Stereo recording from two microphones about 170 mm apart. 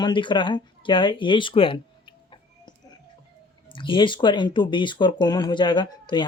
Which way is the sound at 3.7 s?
30° left (ahead or behind).